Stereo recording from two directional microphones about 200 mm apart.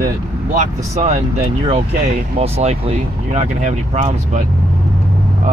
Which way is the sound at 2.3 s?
30° right (ahead or behind).